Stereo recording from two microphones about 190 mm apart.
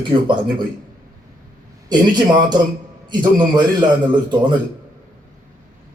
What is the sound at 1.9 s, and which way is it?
A man's voice, 25° right (ahead or behind).